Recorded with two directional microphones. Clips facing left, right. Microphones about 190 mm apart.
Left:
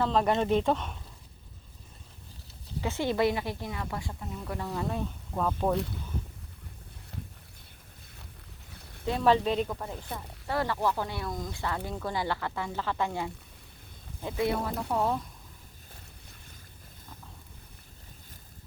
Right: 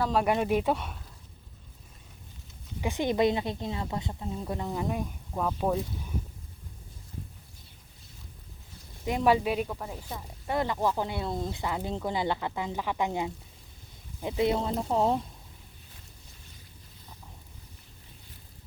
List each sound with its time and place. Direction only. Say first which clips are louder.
0.0 s speech: even; 10° right (ahead or behind)
2.8 s a woman's voice: right 2 dB; 15° right (ahead or behind)
9.0 s speech: even; 15° right (ahead or behind)
10.4 s a woman's voice: right 1 dB; 20° right (ahead or behind)